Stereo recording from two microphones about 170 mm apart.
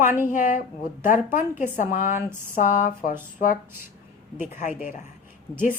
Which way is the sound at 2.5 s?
50° left (ahead or behind).